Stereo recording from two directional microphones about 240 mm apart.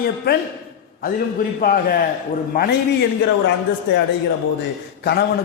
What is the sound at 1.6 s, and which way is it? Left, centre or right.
A man's voice, left.